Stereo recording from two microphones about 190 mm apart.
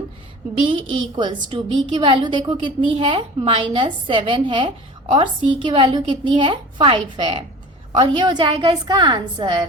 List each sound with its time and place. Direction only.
1.1 s a woman's voice: 25° right (ahead or behind)